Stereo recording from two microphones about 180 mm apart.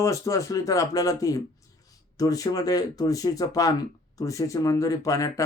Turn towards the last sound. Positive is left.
turn(degrees=20)  # may be behind; listen again after turning